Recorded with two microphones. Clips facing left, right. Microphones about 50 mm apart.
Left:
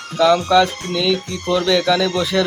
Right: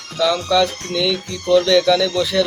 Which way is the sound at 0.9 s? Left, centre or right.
Centre.